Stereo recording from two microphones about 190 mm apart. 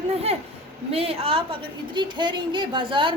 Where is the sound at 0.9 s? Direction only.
30° right (ahead or behind).